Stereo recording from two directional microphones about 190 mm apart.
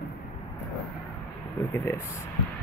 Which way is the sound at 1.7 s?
15° left (ahead or behind).